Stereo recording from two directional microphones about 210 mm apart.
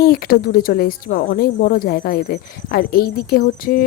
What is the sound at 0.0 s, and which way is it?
Speech, 45° left (ahead or behind).